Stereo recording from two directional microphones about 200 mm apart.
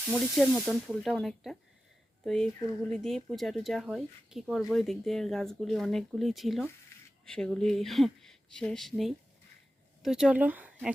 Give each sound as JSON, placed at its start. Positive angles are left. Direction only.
{"t": 0.1, "sound": "speech", "side_deg": 0}